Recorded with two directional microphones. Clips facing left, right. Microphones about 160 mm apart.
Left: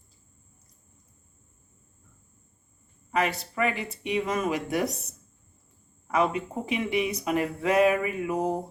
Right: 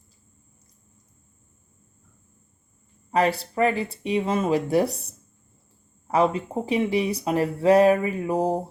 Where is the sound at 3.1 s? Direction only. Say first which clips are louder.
Right 5 dB; 35° right (ahead or behind).